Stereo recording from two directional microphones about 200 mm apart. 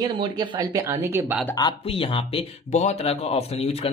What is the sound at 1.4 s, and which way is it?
Speech, 20° left (ahead or behind).